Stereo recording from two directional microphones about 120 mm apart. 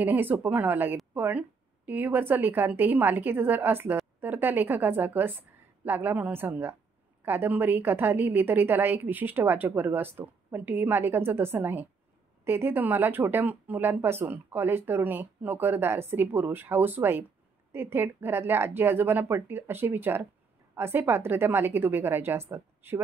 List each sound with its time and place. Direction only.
0.0 s speech: 15° right (ahead or behind)